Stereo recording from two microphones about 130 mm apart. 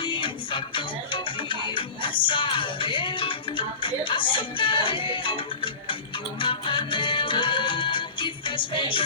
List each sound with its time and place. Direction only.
0.0 s music: 40° left (ahead or behind)